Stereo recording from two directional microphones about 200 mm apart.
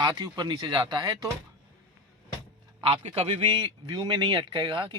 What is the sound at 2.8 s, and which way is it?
Speech, 30° right (ahead or behind).